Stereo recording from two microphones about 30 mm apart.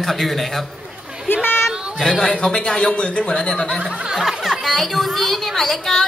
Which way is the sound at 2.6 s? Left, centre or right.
Left.